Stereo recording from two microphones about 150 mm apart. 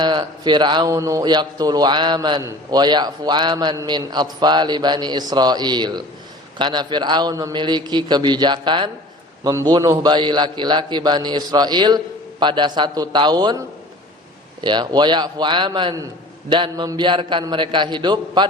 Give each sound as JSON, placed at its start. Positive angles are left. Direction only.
{"t": 0.0, "sound": "a man's voice", "side_deg": -30}
{"t": 14.6, "sound": "a man's voice", "side_deg": -30}